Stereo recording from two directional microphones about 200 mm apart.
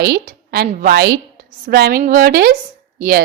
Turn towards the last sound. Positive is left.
turn(degrees=-45)  # may be behind; listen again after turning